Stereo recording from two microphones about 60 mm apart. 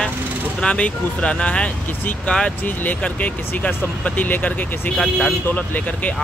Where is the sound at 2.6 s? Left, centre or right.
Left.